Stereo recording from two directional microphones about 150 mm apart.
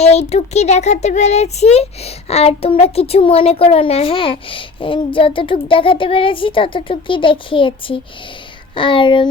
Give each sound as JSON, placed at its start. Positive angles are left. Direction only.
{"t": 0.0, "sound": "speech", "side_deg": 45}